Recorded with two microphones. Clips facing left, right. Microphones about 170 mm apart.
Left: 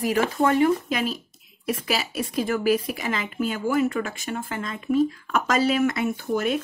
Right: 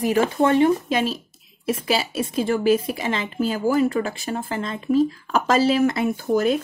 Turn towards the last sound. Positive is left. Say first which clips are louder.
# right 4 dB
turn(degrees=-35)  # may be behind; listen again after turning